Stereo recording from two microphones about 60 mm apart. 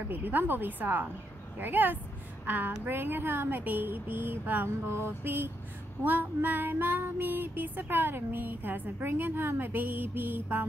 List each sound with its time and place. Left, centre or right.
0.1 s child singing: right
2.4 s a woman's voice: right
2.8 s child singing: right